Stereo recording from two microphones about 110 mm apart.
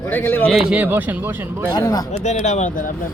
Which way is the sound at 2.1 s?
90° left.